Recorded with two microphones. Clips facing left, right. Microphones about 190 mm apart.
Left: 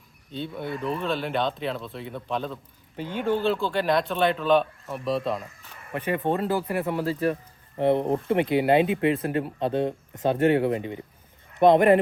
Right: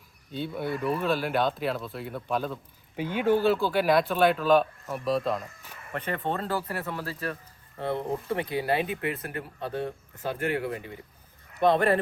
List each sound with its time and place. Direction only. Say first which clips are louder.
0.3 s speech: right 1 dB; 5° right (ahead or behind)
5.9 s speech: left 5 dB; 10° left (ahead or behind)